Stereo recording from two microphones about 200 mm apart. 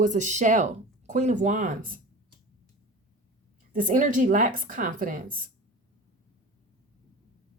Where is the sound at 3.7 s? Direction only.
40° right (ahead or behind).